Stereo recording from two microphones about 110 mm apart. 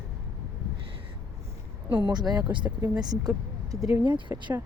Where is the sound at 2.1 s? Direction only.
40° right (ahead or behind).